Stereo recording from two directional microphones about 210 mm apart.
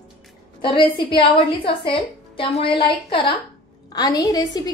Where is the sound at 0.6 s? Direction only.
20° left (ahead or behind).